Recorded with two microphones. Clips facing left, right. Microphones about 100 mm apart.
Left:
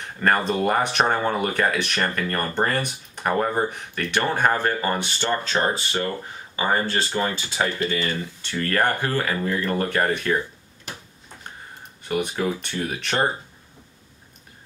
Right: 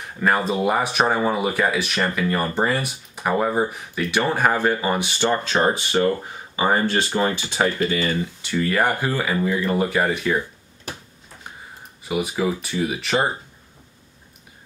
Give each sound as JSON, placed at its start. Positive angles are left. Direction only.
{"t": 0.0, "sound": "speech", "side_deg": -5}
{"t": 12.0, "sound": "speech", "side_deg": -5}